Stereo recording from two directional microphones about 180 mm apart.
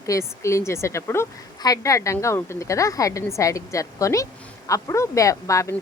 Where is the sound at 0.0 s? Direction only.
15° left (ahead or behind).